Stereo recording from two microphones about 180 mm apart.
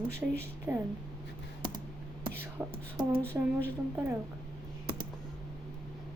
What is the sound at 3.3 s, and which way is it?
Speech, 15° right (ahead or behind).